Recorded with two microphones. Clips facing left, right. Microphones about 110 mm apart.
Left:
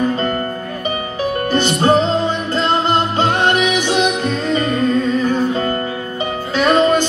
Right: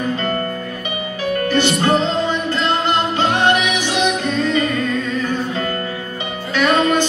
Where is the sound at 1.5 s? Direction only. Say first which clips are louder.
Left 2 dB; 40° left (ahead or behind).